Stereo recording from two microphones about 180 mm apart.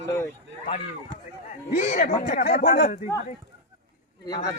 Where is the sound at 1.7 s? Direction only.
40° left (ahead or behind).